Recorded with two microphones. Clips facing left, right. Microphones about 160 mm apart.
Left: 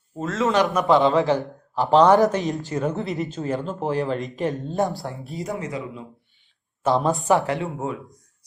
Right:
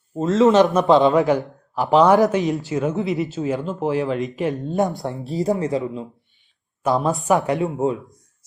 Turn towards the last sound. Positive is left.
turn(degrees=-20)  # may be behind; listen again after turning